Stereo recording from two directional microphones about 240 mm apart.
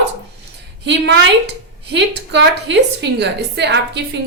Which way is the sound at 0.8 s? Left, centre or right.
Right.